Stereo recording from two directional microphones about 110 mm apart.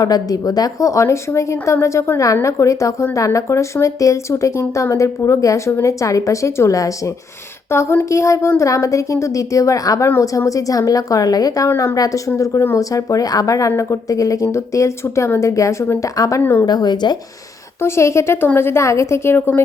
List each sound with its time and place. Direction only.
0.0 s a woman's voice: 35° left (ahead or behind)
11.7 s a woman's voice: 20° left (ahead or behind)
16.6 s a woman's voice: 40° left (ahead or behind)
17.7 s speech: 25° left (ahead or behind)